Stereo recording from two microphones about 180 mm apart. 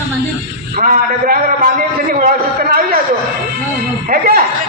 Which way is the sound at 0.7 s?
50° right (ahead or behind).